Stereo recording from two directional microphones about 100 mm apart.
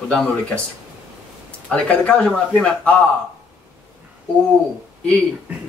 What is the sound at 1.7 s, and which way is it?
Speech, 10° left (ahead or behind).